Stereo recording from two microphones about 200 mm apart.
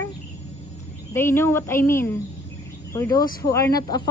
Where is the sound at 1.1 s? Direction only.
10° left (ahead or behind).